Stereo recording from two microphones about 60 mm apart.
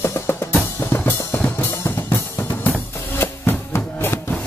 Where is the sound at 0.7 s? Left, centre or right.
Left.